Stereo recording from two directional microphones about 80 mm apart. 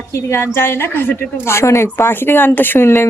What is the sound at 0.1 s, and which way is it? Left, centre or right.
A woman's voice, left.